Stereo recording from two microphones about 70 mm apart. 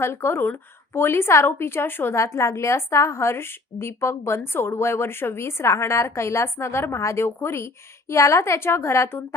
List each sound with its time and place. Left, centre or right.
0.0 s a woman's voice: left
2.1 s a woman's voice: left